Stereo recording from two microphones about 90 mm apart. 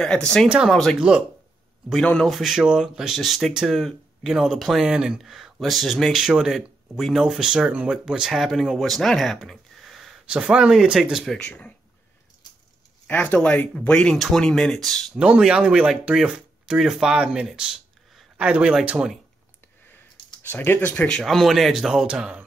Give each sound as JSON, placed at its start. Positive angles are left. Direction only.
{"t": 0.0, "sound": "speech", "side_deg": 10}
{"t": 0.5, "sound": "speech", "side_deg": -10}
{"t": 2.2, "sound": "speech", "side_deg": 0}
{"t": 11.3, "sound": "speech", "side_deg": 10}
{"t": 13.0, "sound": "speech", "side_deg": 20}
{"t": 15.1, "sound": "speech", "side_deg": -10}
{"t": 20.4, "sound": "speech", "side_deg": 20}
{"t": 21.2, "sound": "speech", "side_deg": 0}